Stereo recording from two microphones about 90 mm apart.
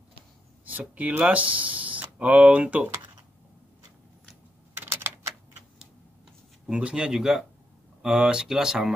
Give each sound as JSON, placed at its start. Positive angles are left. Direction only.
{"t": 0.7, "sound": "speech", "side_deg": -15}
{"t": 4.7, "sound": "typing", "side_deg": -20}
{"t": 6.7, "sound": "speech", "side_deg": -10}